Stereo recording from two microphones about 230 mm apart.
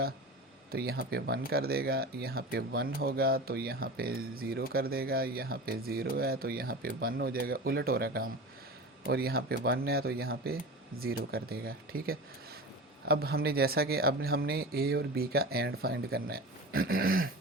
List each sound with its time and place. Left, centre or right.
0.7 s speech: right